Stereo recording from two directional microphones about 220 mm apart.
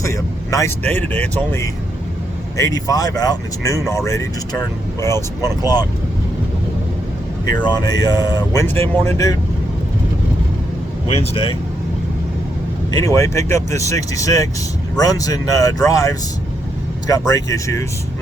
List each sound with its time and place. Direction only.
0.0 s speech: 15° left (ahead or behind)
5.4 s speech: 20° left (ahead or behind)
7.4 s speech: 20° left (ahead or behind)
11.1 s speech: 25° left (ahead or behind)
12.9 s speech: 15° left (ahead or behind)